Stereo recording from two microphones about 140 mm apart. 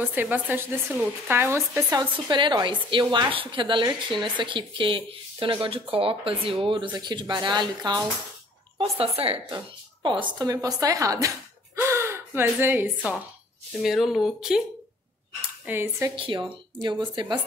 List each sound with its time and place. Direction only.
0.0 s a woman's voice: 15° right (ahead or behind)
1.9 s speech: 25° right (ahead or behind)
8.7 s speech: 45° right (ahead or behind); by 13.2 s 15° right (ahead or behind)
13.7 s speech: centre (ahead or behind)
15.6 s a woman's voice: 15° right (ahead or behind)
16.2 s speech: 35° right (ahead or behind)